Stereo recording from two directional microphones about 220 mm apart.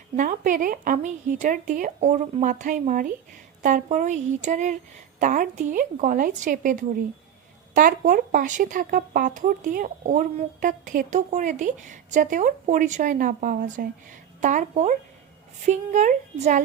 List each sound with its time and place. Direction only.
0.2 s speech: 35° right (ahead or behind)